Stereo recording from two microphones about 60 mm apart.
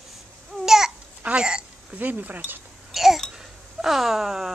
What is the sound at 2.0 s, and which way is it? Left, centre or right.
Speech, right.